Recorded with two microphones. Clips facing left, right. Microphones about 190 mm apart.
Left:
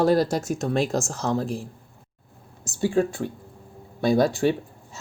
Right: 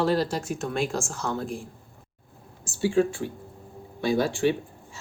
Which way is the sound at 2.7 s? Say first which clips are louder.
Even; 45° left (ahead or behind).